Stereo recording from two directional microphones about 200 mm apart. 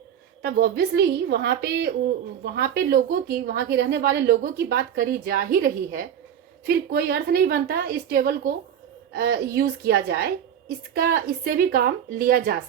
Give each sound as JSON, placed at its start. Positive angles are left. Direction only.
{"t": 0.4, "sound": "a woman's voice", "side_deg": -50}